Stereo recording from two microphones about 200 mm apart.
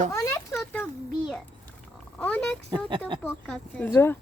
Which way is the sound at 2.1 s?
5° left (ahead or behind).